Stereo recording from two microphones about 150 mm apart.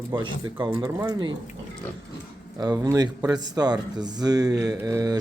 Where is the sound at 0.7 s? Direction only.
25° right (ahead or behind).